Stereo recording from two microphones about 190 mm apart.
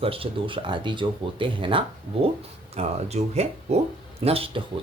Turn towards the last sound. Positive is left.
turn(degrees=-30)  # may be behind; listen again after turning